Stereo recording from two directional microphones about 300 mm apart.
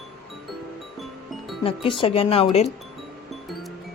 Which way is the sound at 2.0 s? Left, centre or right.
Centre.